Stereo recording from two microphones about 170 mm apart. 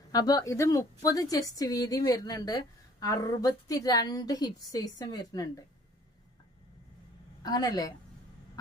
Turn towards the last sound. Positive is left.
turn(degrees=20)  # may be behind; listen again after turning